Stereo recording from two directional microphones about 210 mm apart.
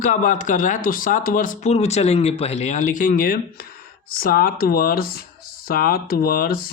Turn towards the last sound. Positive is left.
turn(degrees=45)  # may be behind; listen again after turning